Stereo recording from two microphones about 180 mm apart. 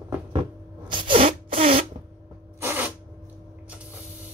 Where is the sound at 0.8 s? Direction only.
25° right (ahead or behind).